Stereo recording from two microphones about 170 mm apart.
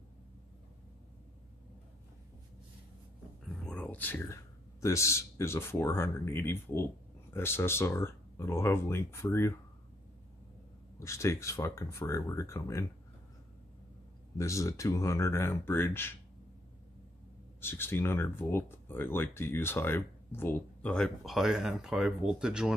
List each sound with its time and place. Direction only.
3.6 s a man's voice: 5° left (ahead or behind)
11.0 s speech: 15° left (ahead or behind)
14.4 s speech: 20° left (ahead or behind)
17.6 s speech: 15° left (ahead or behind); by 22.8 s 5° right (ahead or behind)